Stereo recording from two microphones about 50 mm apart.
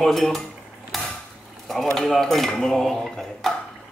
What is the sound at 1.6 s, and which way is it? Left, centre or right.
Speech, centre.